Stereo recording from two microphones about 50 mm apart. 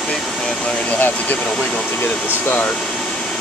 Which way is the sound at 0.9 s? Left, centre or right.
Left.